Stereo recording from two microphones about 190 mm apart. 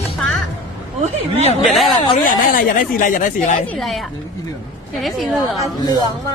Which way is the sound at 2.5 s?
45° left (ahead or behind).